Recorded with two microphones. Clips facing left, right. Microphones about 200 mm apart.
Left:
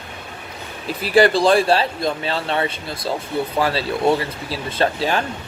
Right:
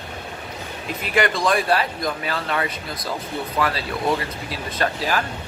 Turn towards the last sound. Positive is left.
turn(degrees=30)  # may be behind; listen again after turning